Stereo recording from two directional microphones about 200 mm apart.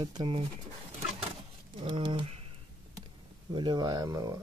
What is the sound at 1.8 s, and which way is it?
Speech, 25° right (ahead or behind).